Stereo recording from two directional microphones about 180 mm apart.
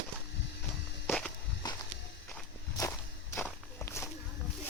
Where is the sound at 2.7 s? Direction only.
15° left (ahead or behind).